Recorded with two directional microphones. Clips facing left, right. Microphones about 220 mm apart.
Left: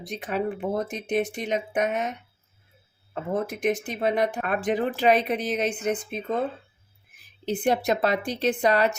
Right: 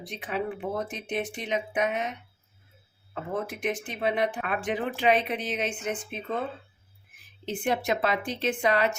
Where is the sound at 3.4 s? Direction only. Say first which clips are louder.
Left 5 dB; 40° left (ahead or behind).